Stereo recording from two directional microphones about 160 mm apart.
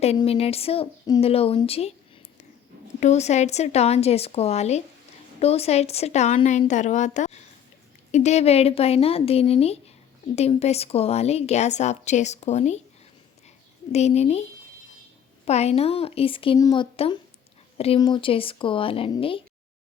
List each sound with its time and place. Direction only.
0.3 s speech: 40° left (ahead or behind)
3.0 s a woman's voice: 45° left (ahead or behind)
13.9 s a woman's voice: 45° left (ahead or behind)
15.4 s speech: 40° left (ahead or behind)